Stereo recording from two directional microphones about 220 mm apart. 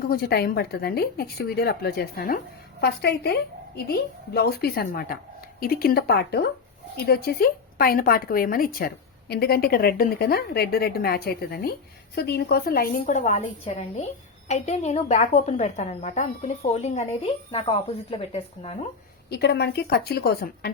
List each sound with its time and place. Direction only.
0.1 s a woman's voice: 45° left (ahead or behind); by 18.9 s 30° left (ahead or behind)
19.3 s a woman's voice: 50° left (ahead or behind)